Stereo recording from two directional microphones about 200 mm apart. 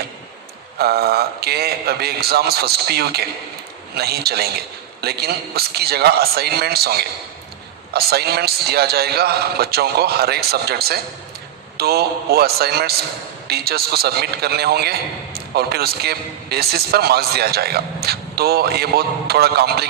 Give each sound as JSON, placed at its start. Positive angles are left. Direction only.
{"t": 0.8, "sound": "a man's voice", "side_deg": -50}